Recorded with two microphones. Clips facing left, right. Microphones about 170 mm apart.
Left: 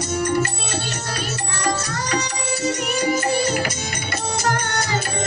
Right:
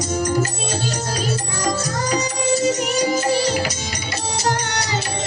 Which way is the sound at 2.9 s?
55° left (ahead or behind).